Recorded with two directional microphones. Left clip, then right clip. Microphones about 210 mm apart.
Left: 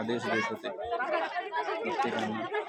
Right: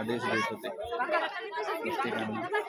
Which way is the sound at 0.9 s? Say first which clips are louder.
Right 1 dB; 50° right (ahead or behind).